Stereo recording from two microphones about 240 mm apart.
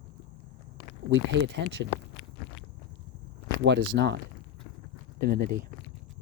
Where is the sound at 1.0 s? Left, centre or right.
Right.